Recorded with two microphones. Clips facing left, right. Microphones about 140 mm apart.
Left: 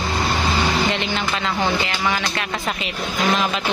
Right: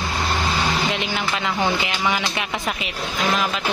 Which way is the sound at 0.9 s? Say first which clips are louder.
Left 1 dB; 5° right (ahead or behind).